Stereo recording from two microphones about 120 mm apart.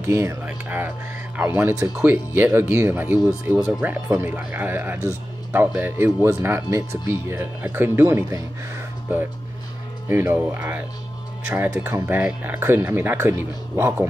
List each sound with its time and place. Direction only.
0.0 s speech: 25° right (ahead or behind)
10.0 s speech: 20° right (ahead or behind)